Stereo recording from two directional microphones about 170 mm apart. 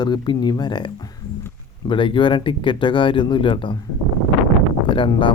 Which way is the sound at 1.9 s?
30° left (ahead or behind).